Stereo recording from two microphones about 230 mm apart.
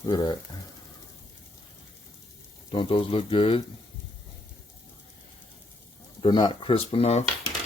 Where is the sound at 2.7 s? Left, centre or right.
Left.